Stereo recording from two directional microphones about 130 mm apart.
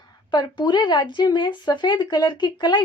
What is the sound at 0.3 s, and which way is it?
A woman's voice, 35° left (ahead or behind).